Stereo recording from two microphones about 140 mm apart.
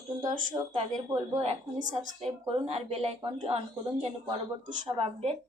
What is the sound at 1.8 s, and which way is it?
Speech, 65° right (ahead or behind).